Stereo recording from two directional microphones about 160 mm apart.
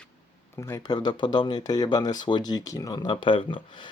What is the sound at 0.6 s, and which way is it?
Speech, 20° left (ahead or behind).